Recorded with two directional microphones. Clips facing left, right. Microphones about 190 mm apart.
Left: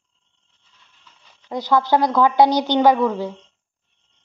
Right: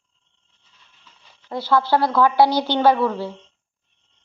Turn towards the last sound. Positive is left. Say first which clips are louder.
# left 1 dB
turn(degrees=15)  # may be behind; listen again after turning